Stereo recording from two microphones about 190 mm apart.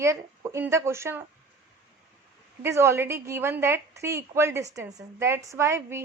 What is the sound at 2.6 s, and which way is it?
Speech, 15° right (ahead or behind).